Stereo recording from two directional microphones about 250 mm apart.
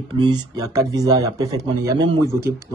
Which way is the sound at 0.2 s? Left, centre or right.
Centre.